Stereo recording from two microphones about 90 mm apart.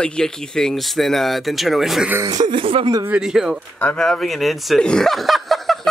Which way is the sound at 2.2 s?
65° right (ahead or behind).